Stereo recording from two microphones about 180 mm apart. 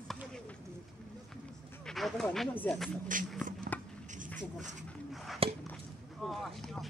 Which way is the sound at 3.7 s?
10° left (ahead or behind).